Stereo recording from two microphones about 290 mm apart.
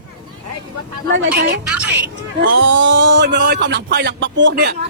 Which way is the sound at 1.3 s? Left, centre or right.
Right.